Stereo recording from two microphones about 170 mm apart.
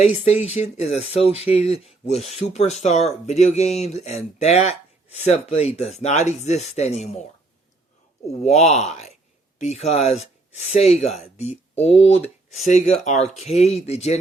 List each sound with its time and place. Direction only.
0.3 s speech: 40° left (ahead or behind)
8.3 s speech: 40° left (ahead or behind)